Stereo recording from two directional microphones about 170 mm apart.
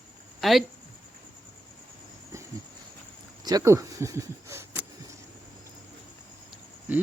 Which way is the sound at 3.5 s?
20° right (ahead or behind).